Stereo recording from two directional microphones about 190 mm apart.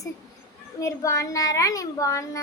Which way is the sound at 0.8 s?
15° left (ahead or behind).